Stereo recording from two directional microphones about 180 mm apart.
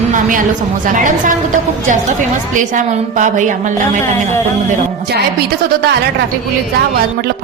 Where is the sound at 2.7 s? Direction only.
45° right (ahead or behind).